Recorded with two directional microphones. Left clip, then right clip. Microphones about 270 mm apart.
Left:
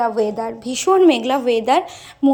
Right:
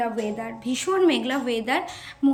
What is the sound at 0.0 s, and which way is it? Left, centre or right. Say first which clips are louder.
Speech: left 8 dB; left.